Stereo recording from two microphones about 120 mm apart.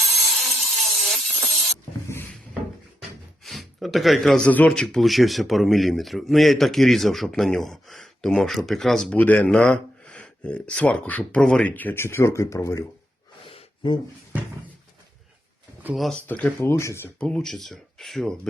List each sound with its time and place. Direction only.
0.0 s a sound: centre (ahead or behind)
3.4 s speech: centre (ahead or behind)
9.1 s speech: 15° left (ahead or behind)
13.5 s a sound: 45° left (ahead or behind)
16.0 s speech: 5° left (ahead or behind)
16.2 s speech: 15° left (ahead or behind)
17.2 s speech: 5° left (ahead or behind)